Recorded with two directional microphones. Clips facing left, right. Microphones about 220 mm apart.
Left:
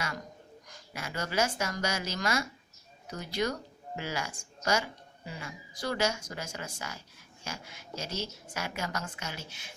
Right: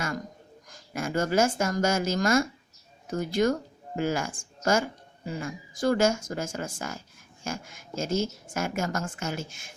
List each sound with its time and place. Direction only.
0.7 s a woman's voice: 50° right (ahead or behind)